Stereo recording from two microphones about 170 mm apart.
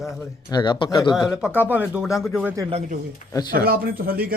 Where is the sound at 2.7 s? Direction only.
40° right (ahead or behind).